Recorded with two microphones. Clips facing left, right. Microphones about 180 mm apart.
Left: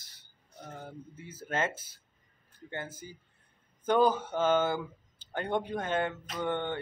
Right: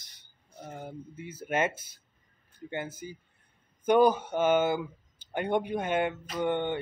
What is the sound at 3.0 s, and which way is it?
Speech, 15° right (ahead or behind).